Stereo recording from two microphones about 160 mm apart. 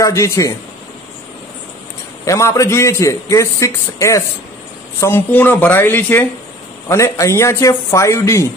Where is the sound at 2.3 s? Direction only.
20° left (ahead or behind).